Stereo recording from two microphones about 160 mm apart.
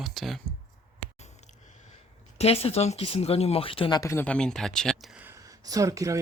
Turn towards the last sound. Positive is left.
turn(degrees=-20)  # may be behind; listen again after turning